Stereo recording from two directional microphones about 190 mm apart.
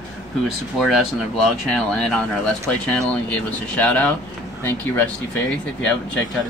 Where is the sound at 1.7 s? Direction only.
5° left (ahead or behind).